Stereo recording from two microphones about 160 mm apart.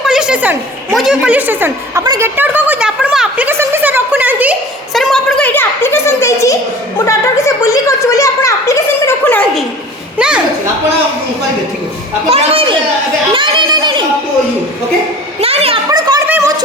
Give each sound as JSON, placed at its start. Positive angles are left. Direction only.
{"t": 0.0, "sound": "a woman's voice", "side_deg": -5}
{"t": 4.9, "sound": "a child's voice", "side_deg": 0}
{"t": 7.1, "sound": "a sound", "side_deg": 20}
{"t": 10.2, "sound": "speech", "side_deg": -5}
{"t": 12.3, "sound": "speech", "side_deg": -40}
{"t": 15.4, "sound": "a child's voice", "side_deg": -40}
{"t": 15.9, "sound": "a child's voice", "side_deg": -25}
{"t": 16.2, "sound": "a sound", "side_deg": -10}